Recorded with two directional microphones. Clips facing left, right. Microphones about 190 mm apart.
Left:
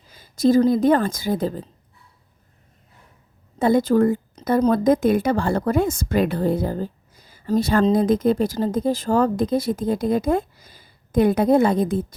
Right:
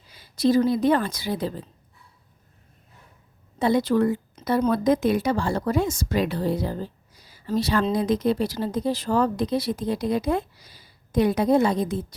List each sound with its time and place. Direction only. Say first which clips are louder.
0.1 s speech: left 3 dB; 45° left (ahead or behind)
3.6 s a woman's voice: left 4 dB; 50° left (ahead or behind)